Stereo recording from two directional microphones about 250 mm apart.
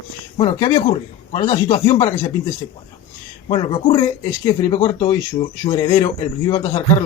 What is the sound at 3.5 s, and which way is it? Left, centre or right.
A man's voice, centre.